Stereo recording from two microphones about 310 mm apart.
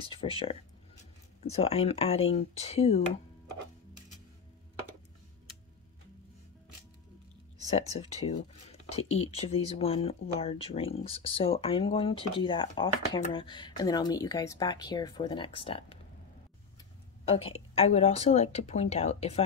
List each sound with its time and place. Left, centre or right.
0.1 s speech: centre
7.7 s speech: centre
17.2 s speech: centre